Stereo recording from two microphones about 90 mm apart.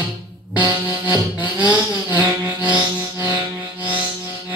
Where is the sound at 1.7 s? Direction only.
20° right (ahead or behind).